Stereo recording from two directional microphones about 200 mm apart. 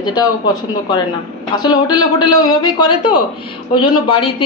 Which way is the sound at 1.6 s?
20° left (ahead or behind).